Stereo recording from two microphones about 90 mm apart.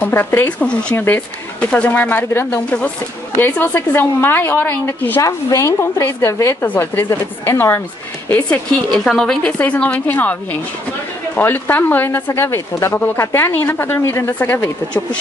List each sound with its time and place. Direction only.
0.0 s speech: 25° left (ahead or behind)
5.2 s a woman's voice: 35° left (ahead or behind)